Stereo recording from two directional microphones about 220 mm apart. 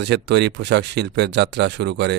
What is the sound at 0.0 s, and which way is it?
A man's voice, 50° right (ahead or behind).